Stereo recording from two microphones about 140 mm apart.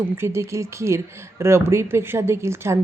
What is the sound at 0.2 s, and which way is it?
Speech, 20° right (ahead or behind).